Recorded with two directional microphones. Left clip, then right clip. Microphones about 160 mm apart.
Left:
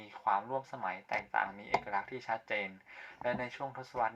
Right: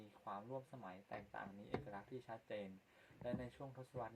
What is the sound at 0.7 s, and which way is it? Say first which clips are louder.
Speech: left 17 dB; 30° left (ahead or behind).